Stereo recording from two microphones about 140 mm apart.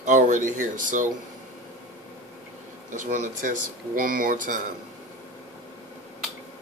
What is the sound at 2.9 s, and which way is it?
Speech, 65° right (ahead or behind).